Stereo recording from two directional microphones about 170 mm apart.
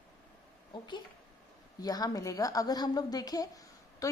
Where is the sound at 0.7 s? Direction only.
25° left (ahead or behind).